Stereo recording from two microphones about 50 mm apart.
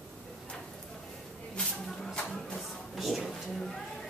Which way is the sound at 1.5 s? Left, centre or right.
Centre.